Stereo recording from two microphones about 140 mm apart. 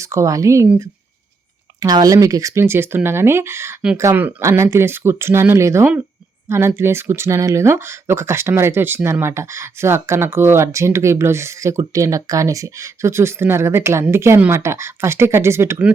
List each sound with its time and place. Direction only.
0.0 s speech: 20° right (ahead or behind)
1.8 s speech: 30° right (ahead or behind)